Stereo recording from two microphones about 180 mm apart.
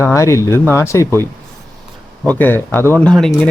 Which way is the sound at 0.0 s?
15° left (ahead or behind).